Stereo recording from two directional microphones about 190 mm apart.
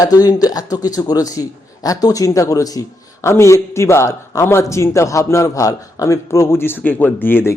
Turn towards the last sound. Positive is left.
turn(degrees=10)  # may be behind; listen again after turning